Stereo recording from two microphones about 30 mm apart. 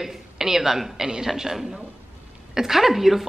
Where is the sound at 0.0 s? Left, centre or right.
Centre.